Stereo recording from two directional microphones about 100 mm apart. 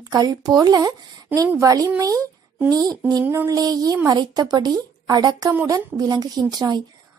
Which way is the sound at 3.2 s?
20° right (ahead or behind).